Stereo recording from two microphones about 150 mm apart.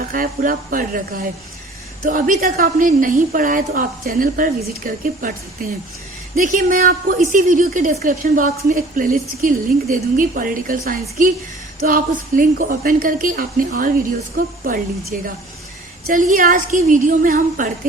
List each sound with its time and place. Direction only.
0.0 s a woman's voice: 65° right (ahead or behind)
15.1 s a woman's voice: 65° right (ahead or behind)